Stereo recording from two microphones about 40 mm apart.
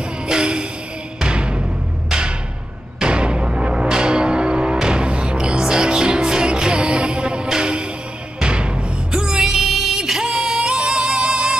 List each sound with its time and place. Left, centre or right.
0.3 s train: right
1.2 s music: right